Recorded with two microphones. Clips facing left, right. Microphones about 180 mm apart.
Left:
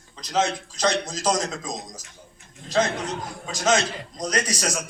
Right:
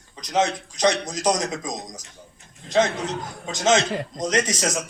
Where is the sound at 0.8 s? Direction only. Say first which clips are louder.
Right 3 dB; 15° right (ahead or behind).